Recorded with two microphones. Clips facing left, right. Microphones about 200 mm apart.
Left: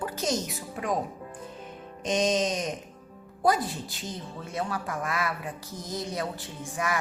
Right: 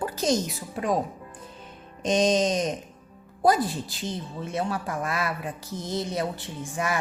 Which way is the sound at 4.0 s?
25° right (ahead or behind).